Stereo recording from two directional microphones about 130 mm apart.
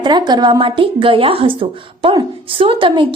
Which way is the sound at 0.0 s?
35° right (ahead or behind).